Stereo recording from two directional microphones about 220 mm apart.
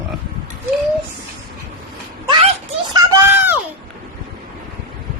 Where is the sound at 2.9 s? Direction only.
10° right (ahead or behind).